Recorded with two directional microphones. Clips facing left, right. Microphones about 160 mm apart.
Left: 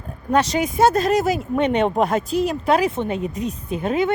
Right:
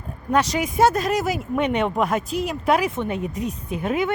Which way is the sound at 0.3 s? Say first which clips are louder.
Left 2 dB; 25° left (ahead or behind).